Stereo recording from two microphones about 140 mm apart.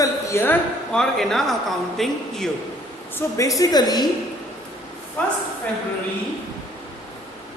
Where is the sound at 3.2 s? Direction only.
25° left (ahead or behind).